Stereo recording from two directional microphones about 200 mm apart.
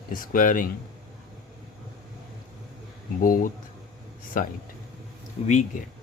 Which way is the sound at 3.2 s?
45° left (ahead or behind).